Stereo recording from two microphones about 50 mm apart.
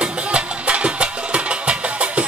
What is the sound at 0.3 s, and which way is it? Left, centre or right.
Music, right.